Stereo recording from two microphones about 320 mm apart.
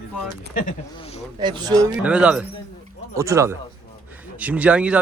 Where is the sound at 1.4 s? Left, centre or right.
Centre.